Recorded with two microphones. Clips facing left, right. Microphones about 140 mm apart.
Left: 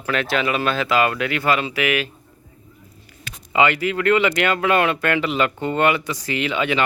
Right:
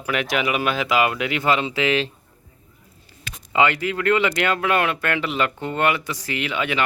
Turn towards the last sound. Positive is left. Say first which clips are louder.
# left 3 dB
turn(degrees=20)  # may be behind; listen again after turning